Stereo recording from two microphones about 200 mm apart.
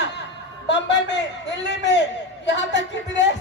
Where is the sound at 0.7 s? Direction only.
60° left (ahead or behind).